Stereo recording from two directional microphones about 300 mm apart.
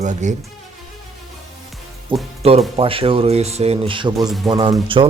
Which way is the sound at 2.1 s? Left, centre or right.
Centre.